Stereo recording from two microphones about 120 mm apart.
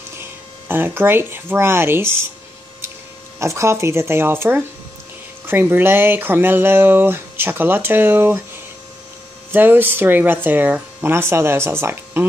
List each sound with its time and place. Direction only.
0.2 s speech: 20° right (ahead or behind)
3.3 s speech: 25° right (ahead or behind)
9.5 s speech: 15° right (ahead or behind)